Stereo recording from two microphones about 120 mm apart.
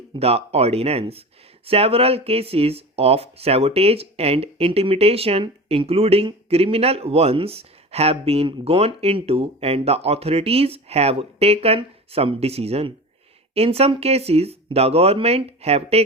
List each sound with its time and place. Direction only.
0.2 s speech: 55° right (ahead or behind)